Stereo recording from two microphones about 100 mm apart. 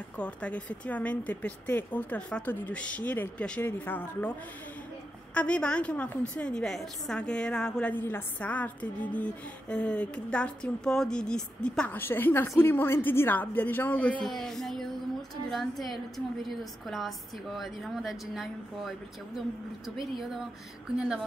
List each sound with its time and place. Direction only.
0.2 s a woman's voice: 15° left (ahead or behind)
5.3 s a woman's voice: 10° left (ahead or behind)
7.9 s a woman's voice: 20° left (ahead or behind)
12.0 s a woman's voice: 20° left (ahead or behind)
14.3 s speech: centre (ahead or behind)